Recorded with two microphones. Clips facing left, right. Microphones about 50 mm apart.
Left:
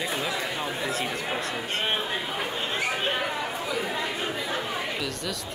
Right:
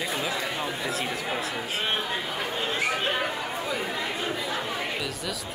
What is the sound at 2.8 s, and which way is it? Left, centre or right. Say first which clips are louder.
Speech: right 1 dB; centre.